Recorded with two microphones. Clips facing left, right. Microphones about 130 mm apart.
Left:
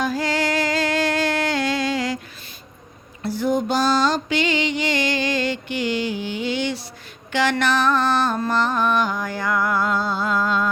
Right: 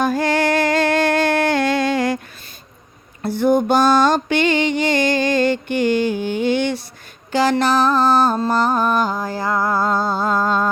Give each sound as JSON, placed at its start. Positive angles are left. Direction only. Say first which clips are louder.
{"t": 0.0, "sound": "music", "louder": "right 5 dB", "side_deg": -55}
{"t": 3.2, "sound": "music", "louder": "right 5 dB", "side_deg": -55}
{"t": 7.3, "sound": "music", "louder": "right 4 dB", "side_deg": -35}